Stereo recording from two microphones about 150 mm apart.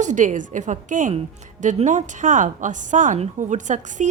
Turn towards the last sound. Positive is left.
turn(degrees=-55)  # may be behind; listen again after turning